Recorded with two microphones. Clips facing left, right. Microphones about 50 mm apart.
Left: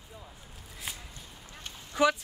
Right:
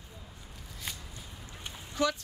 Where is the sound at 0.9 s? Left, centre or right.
Centre.